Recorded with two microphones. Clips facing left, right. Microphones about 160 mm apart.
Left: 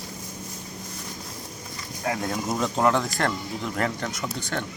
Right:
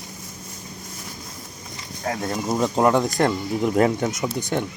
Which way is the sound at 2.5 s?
15° right (ahead or behind).